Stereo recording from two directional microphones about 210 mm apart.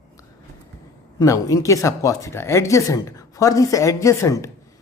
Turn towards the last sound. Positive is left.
turn(degrees=15)  # may be behind; listen again after turning